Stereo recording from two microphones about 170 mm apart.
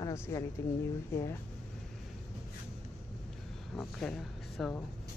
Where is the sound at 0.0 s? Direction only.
20° left (ahead or behind).